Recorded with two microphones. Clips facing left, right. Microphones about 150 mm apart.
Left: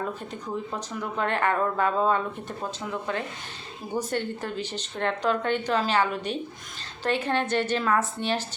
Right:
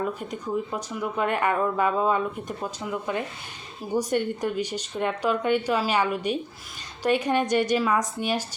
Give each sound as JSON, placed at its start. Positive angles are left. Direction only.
{"t": 0.2, "sound": "speech", "side_deg": -10}